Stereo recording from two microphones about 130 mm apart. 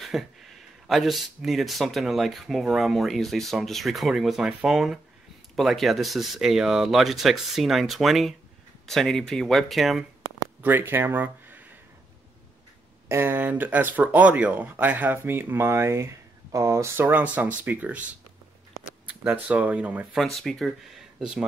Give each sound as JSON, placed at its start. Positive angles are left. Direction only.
{"t": 0.0, "sound": "speech", "side_deg": 0}
{"t": 10.6, "sound": "speech", "side_deg": -15}
{"t": 13.1, "sound": "speech", "side_deg": -15}
{"t": 19.0, "sound": "speech", "side_deg": -10}
{"t": 20.2, "sound": "speech", "side_deg": 0}